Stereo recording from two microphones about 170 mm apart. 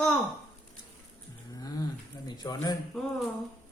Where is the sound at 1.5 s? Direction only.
20° left (ahead or behind).